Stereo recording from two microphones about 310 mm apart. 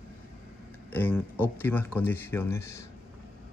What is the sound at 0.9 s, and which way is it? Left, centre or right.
Speech, centre.